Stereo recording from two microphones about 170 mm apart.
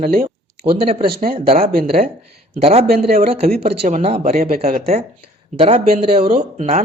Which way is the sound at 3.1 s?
35° right (ahead or behind).